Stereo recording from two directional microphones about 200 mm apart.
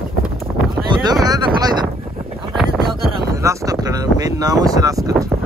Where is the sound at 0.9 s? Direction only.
20° right (ahead or behind).